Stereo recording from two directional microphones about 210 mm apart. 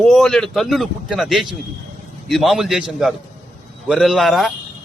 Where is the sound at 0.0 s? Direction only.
Centre (ahead or behind).